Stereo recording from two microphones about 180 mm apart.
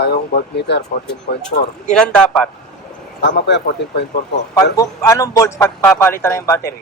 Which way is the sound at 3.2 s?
80° left.